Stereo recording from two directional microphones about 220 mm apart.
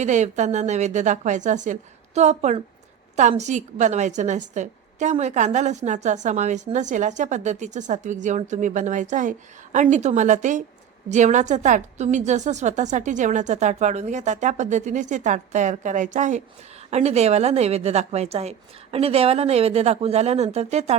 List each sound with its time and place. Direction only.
0.0 s a woman's voice: 35° right (ahead or behind)